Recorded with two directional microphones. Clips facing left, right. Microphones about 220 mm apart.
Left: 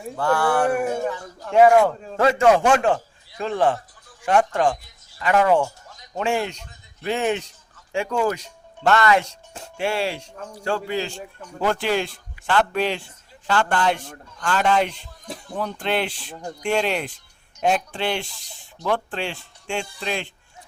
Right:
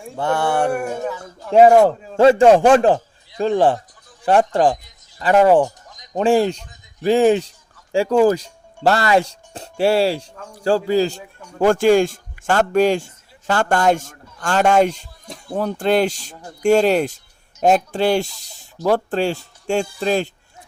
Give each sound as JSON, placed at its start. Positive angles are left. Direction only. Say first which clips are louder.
{"t": 0.2, "sound": "speech", "louder": "right 1 dB", "side_deg": -25}
{"t": 0.7, "sound": "speech", "louder": "even", "side_deg": 0}
{"t": 1.5, "sound": "speech", "louder": "right 4 dB", "side_deg": -35}
{"t": 5.5, "sound": "a sound", "louder": "right 6 dB", "side_deg": -15}
{"t": 6.1, "sound": "speech", "louder": "right 8 dB", "side_deg": -35}